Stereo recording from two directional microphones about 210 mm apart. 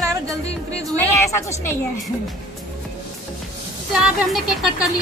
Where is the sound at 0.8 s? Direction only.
15° right (ahead or behind).